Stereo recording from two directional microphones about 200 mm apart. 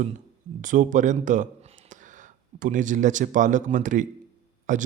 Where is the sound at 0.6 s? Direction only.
40° right (ahead or behind).